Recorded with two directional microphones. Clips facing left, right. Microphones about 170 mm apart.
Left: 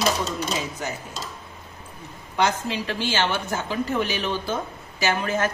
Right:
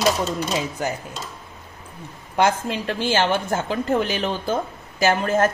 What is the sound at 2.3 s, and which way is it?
A woman's voice, 50° right (ahead or behind).